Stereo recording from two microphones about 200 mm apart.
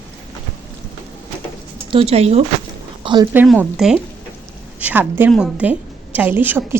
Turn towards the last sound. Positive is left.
turn(degrees=-10)  # may be behind; listen again after turning